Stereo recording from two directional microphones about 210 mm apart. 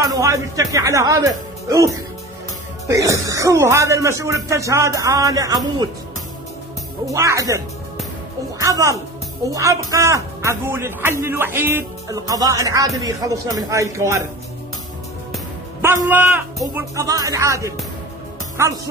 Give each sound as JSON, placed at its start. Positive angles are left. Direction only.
{"t": 0.1, "sound": "speech", "side_deg": -15}
{"t": 2.9, "sound": "speech", "side_deg": -15}
{"t": 7.1, "sound": "speech", "side_deg": -15}
{"t": 16.1, "sound": "speech", "side_deg": -10}